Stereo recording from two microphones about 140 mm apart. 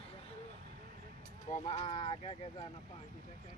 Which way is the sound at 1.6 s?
55° left (ahead or behind).